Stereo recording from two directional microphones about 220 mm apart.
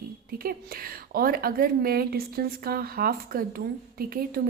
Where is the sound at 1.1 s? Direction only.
40° right (ahead or behind).